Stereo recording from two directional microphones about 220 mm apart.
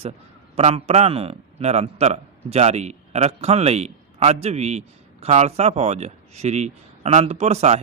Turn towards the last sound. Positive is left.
turn(degrees=-30)  # may be behind; listen again after turning